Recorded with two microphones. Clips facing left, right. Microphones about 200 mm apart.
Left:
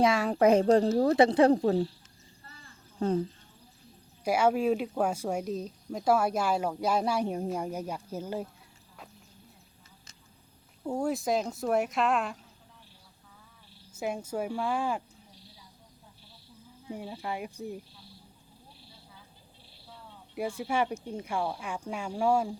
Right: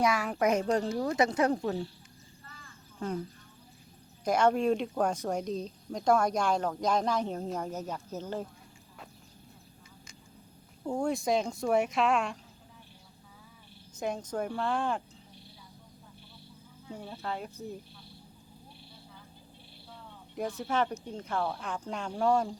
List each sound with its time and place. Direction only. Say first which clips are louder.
0.0 s speech: left 4 dB; 30° left (ahead or behind)
3.0 s speech: left 7 dB; 30° left (ahead or behind)
4.2 s speech: even; 10° left (ahead or behind)
10.8 s speech: even; 5° left (ahead or behind)
13.9 s speech: left 1 dB; 10° left (ahead or behind)
16.9 s speech: left 2 dB; 15° left (ahead or behind)
20.3 s speech: left 1 dB; 10° left (ahead or behind)